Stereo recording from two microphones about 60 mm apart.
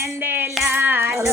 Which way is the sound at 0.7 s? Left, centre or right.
Right.